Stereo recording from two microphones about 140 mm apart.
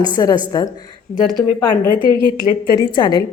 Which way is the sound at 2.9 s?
35° left (ahead or behind).